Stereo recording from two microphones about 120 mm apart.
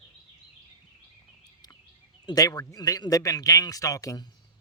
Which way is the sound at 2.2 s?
30° left (ahead or behind).